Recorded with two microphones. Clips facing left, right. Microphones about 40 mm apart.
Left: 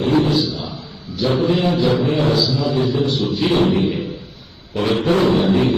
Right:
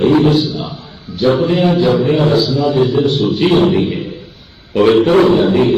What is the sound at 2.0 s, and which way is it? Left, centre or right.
A man's voice, right.